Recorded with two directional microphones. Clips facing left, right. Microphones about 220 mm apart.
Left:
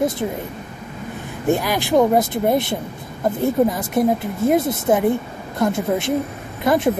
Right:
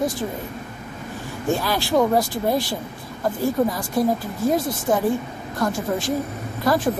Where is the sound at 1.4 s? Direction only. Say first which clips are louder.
Left 3 dB; 15° left (ahead or behind).